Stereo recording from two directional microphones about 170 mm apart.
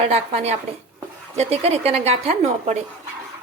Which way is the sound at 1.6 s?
35° right (ahead or behind).